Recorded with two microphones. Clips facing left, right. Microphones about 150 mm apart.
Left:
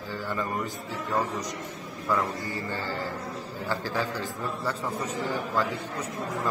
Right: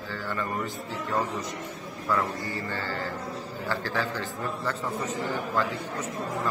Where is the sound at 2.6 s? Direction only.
15° left (ahead or behind).